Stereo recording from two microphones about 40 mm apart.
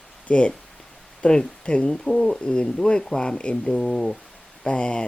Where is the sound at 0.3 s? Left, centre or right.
Left; by 4.2 s centre.